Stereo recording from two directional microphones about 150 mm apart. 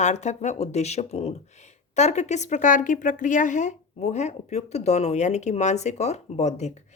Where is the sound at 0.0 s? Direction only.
50° left (ahead or behind).